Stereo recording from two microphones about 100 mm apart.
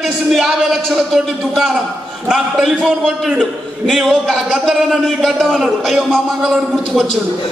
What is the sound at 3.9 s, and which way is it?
A man's voice, 5° left (ahead or behind).